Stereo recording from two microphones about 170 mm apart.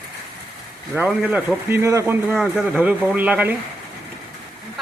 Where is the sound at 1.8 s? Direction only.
15° right (ahead or behind).